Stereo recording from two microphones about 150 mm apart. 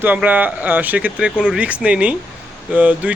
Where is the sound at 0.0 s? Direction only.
10° right (ahead or behind).